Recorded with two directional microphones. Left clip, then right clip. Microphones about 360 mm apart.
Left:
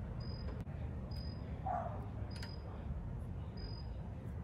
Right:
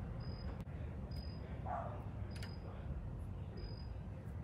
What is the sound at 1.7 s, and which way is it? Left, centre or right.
Bow-wow, left.